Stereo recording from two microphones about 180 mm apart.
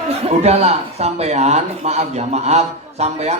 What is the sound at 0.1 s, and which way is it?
A man's voice, 35° right (ahead or behind).